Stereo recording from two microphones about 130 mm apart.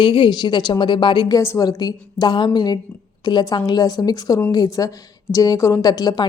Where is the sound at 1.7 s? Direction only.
30° left (ahead or behind).